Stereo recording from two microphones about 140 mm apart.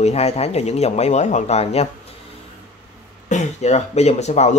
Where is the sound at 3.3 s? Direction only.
55° left (ahead or behind).